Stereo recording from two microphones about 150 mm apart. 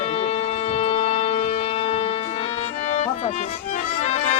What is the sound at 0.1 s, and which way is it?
Organ, 45° left (ahead or behind).